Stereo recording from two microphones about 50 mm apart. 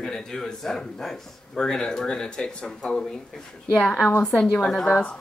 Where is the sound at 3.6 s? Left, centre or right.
Left.